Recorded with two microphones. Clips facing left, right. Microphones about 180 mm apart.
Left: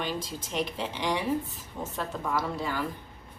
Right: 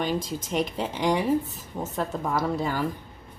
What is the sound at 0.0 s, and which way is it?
Speech, 45° right (ahead or behind).